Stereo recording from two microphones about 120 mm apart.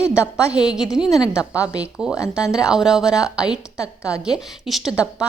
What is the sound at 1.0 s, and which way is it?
Speech, 30° left (ahead or behind).